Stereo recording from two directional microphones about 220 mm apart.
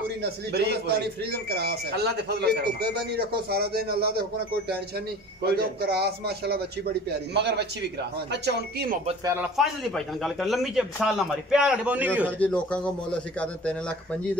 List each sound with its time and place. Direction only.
0.2 s speech: 45° right (ahead or behind)
9.2 s a man's voice: 10° right (ahead or behind)
9.6 s a man's voice: centre (ahead or behind)
12.3 s a man's voice: 5° left (ahead or behind)